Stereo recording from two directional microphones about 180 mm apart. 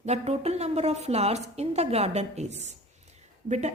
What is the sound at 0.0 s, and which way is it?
A woman's voice, 35° right (ahead or behind).